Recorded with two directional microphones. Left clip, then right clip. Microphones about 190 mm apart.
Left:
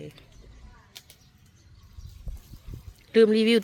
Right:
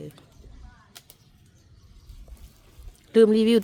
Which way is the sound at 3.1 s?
25° right (ahead or behind).